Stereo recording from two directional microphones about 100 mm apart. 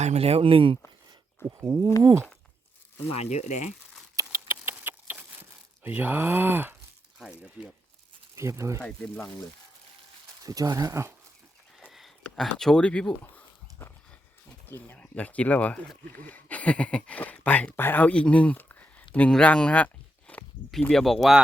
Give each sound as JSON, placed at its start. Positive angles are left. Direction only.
{"t": 0.0, "sound": "speech", "side_deg": -85}
{"t": 1.6, "sound": "speech", "side_deg": -40}
{"t": 3.1, "sound": "speech", "side_deg": 90}
{"t": 4.1, "sound": "patter", "side_deg": -35}
{"t": 4.4, "sound": "a sound", "side_deg": -20}
{"t": 5.8, "sound": "speech", "side_deg": -20}
{"t": 7.2, "sound": "speech", "side_deg": -5}
{"t": 8.4, "sound": "speech", "side_deg": -30}
{"t": 8.8, "sound": "speech", "side_deg": 10}
{"t": 10.4, "sound": "speech", "side_deg": -35}
{"t": 11.9, "sound": "speech", "side_deg": 0}
{"t": 13.3, "sound": "dog", "side_deg": 25}
{"t": 14.7, "sound": "speech", "side_deg": 20}
{"t": 20.9, "sound": "speech", "side_deg": 0}